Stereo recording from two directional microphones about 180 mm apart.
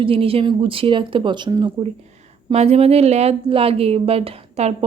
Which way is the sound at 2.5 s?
35° right (ahead or behind).